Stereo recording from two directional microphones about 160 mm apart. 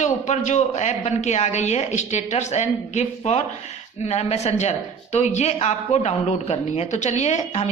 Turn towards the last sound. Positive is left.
turn(degrees=45)  # may be behind; listen again after turning